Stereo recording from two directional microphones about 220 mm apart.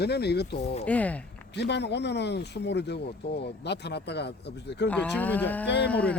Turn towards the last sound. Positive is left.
turn(degrees=5)  # may be behind; listen again after turning